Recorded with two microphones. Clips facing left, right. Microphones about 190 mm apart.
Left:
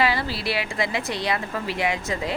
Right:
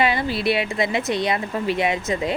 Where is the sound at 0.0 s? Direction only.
20° right (ahead or behind).